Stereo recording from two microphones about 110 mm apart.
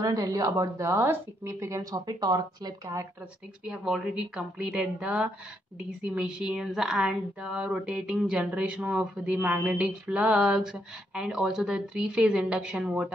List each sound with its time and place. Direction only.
0.0 s speech: 35° right (ahead or behind)
3.6 s speech: 5° right (ahead or behind)